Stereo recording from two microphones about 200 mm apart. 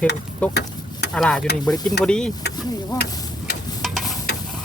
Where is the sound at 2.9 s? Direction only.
20° left (ahead or behind).